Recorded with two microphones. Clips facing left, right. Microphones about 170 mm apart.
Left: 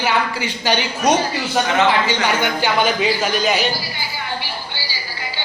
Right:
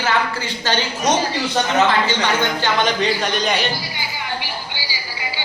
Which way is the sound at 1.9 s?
10° left (ahead or behind).